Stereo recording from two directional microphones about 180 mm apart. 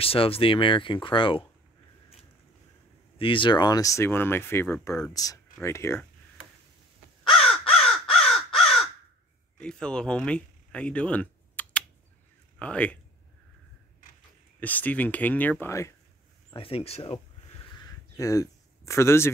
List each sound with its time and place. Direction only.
0.0 s speech: 30° left (ahead or behind)
3.2 s speech: 30° left (ahead or behind); by 5.1 s 5° left (ahead or behind)
5.1 s speech: 20° left (ahead or behind)
7.2 s crow: centre (ahead or behind)
9.6 s speech: 5° left (ahead or behind)
14.6 s speech: 10° left (ahead or behind)
16.5 s speech: 30° left (ahead or behind)
17.7 s a sound: 20° left (ahead or behind)